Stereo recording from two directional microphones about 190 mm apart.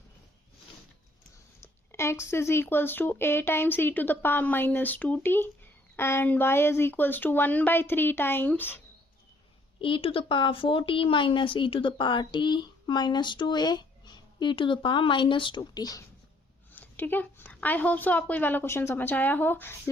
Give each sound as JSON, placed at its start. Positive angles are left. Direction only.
{"t": 1.6, "sound": "speech", "side_deg": 15}
{"t": 9.8, "sound": "speech", "side_deg": 25}